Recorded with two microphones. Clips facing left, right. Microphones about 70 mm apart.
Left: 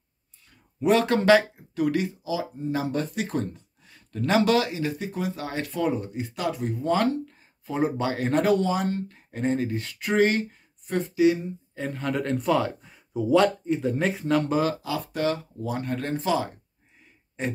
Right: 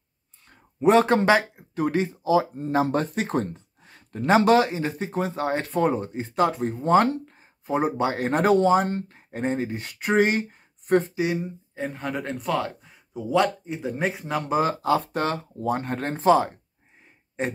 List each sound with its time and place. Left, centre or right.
0.7 s speech: right
2.2 s speech: right; by 14.6 s centre
14.8 s speech: right